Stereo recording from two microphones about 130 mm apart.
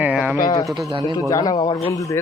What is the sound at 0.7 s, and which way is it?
Speech, centre (ahead or behind).